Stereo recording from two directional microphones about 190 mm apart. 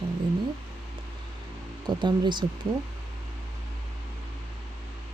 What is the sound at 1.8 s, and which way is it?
Speech, 25° right (ahead or behind).